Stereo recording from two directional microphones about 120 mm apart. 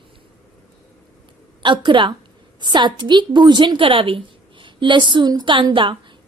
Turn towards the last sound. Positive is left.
turn(degrees=-45)  # may be behind; listen again after turning